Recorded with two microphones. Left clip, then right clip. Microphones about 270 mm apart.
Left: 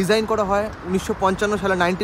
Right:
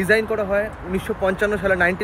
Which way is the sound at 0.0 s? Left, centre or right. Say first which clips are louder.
Even; centre.